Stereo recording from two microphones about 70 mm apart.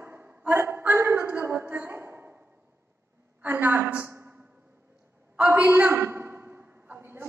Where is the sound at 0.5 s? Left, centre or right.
Right.